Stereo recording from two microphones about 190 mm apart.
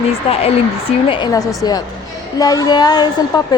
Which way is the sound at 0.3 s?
30° left (ahead or behind).